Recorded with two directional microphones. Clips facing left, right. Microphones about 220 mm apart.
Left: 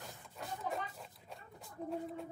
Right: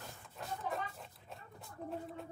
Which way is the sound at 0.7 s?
Centre (ahead or behind).